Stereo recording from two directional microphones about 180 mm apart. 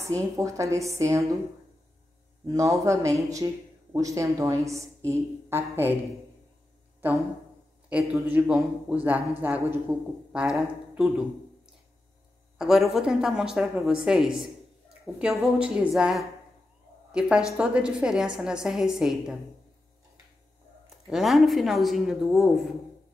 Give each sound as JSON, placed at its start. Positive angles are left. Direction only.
{"t": 0.0, "sound": "a man's voice", "side_deg": -15}
{"t": 2.4, "sound": "a man's voice", "side_deg": -20}
{"t": 8.1, "sound": "a man's voice", "side_deg": -5}
{"t": 12.5, "sound": "speech", "side_deg": 0}
{"t": 21.1, "sound": "speech", "side_deg": 0}